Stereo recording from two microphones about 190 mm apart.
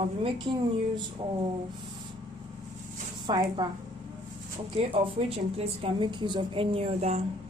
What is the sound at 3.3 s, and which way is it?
Speech, 25° right (ahead or behind).